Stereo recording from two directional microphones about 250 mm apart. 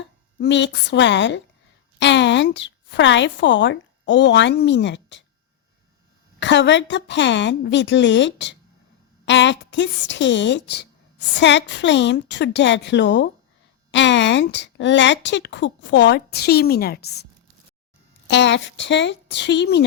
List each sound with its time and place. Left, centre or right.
0.0 s a woman's voice: left
6.4 s a woman's voice: left
18.3 s a woman's voice: left